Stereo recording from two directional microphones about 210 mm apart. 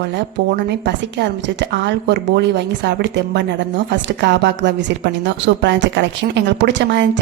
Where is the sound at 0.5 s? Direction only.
55° right (ahead or behind).